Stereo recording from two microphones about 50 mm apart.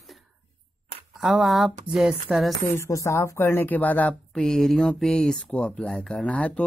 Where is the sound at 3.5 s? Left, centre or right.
Left.